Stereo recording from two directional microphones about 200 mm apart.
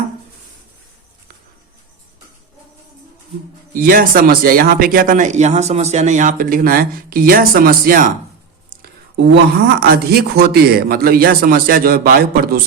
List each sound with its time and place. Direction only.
3.8 s speech: 45° right (ahead or behind)
8.7 s a sound: 50° right (ahead or behind)
9.8 s speech: 50° right (ahead or behind)